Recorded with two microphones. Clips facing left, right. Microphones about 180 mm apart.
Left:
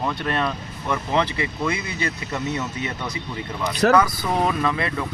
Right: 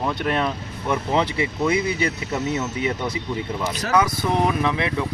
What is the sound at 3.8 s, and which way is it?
Speech, 60° left (ahead or behind).